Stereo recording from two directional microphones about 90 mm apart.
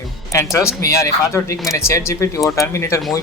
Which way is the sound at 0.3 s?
35° left (ahead or behind).